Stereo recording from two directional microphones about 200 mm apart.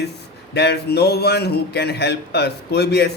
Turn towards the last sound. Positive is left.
turn(degrees=55)  # may be behind; listen again after turning